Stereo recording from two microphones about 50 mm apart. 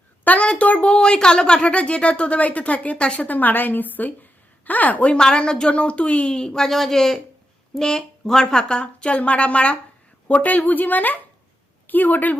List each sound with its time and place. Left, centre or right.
0.3 s a woman's voice: left
3.2 s a woman's voice: left
5.1 s speech: centre
10.2 s speech: left